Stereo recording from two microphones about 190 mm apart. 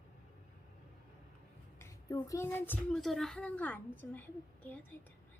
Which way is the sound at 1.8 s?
15° left (ahead or behind).